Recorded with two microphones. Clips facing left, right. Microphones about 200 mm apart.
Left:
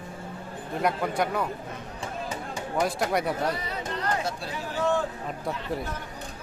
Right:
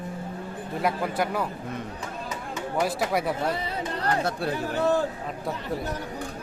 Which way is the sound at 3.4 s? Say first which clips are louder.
Right 1 dB; 30° right (ahead or behind).